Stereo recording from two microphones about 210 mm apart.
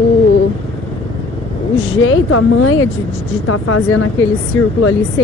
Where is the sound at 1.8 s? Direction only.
70° left (ahead or behind); by 4.1 s 90° left.